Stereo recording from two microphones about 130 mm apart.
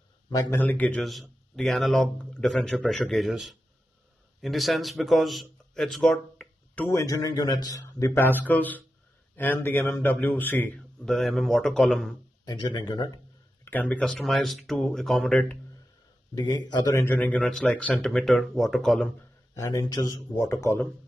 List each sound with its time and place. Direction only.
0.3 s a man's voice: 15° left (ahead or behind)
1.0 s a man's voice: centre (ahead or behind)
6.9 s a man's voice: 25° left (ahead or behind)
11.1 s a man's voice: centre (ahead or behind)
12.4 s a man's voice: 35° left (ahead or behind)
13.7 s a man's voice: 10° left (ahead or behind)
16.3 s a man's voice: 30° left (ahead or behind)
17.0 s a man's voice: 15° left (ahead or behind)
19.6 s speech: 25° left (ahead or behind)